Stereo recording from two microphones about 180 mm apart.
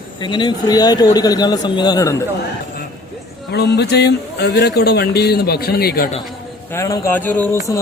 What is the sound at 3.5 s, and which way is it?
A man's voice, 65° left (ahead or behind).